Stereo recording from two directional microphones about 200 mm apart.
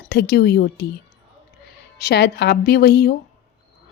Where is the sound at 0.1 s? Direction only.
50° left (ahead or behind).